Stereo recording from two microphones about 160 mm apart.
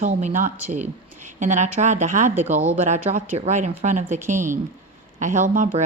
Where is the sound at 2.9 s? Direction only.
50° right (ahead or behind).